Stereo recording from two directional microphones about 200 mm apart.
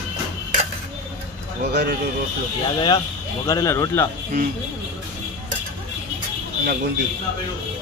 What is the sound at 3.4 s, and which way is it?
Speech, 15° left (ahead or behind).